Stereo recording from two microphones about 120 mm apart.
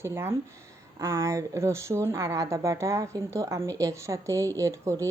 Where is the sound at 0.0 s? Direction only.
20° right (ahead or behind).